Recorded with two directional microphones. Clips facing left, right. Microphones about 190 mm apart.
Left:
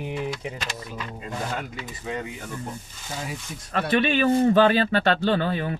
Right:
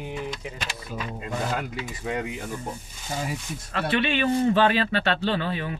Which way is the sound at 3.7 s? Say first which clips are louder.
Left 3 dB; 45° left (ahead or behind).